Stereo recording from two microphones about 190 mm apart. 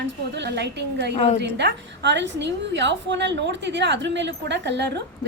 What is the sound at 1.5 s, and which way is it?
A woman's voice, 65° right (ahead or behind).